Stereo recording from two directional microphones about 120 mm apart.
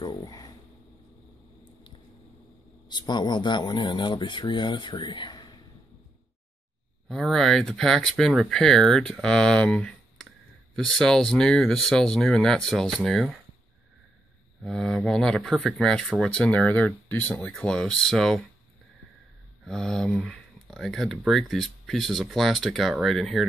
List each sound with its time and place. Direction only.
0.0 s speech: 40° left (ahead or behind)
2.9 s speech: 35° left (ahead or behind)
7.1 s speech: centre (ahead or behind)
14.6 s speech: 5° left (ahead or behind)
19.6 s speech: 5° left (ahead or behind)